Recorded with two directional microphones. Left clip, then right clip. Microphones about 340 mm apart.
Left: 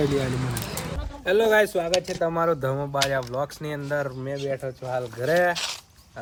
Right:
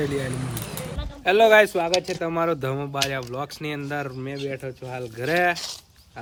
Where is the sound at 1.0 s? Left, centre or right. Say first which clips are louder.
Right 4 dB; centre.